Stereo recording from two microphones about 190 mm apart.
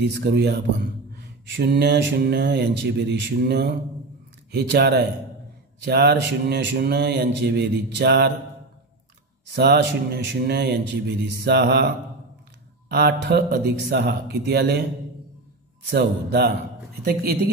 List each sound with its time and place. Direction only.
0.0 s speech: 60° right (ahead or behind)
9.5 s speech: 60° right (ahead or behind)
12.9 s speech: 60° right (ahead or behind)
15.9 s speech: 60° right (ahead or behind)